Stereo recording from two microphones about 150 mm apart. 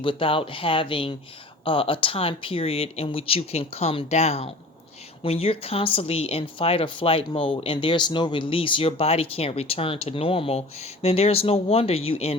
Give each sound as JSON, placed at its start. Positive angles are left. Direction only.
{"t": 0.0, "sound": "speech", "side_deg": 35}